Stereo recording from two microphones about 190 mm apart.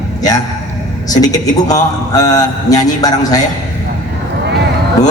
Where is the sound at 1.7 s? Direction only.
20° left (ahead or behind).